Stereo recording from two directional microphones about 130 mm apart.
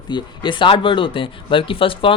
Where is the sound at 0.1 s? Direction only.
35° left (ahead or behind).